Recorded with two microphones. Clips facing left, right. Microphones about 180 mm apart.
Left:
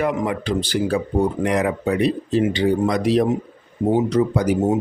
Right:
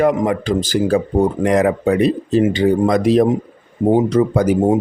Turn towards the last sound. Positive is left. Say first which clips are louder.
# right 4 dB
turn(degrees=-50)  # may be behind; listen again after turning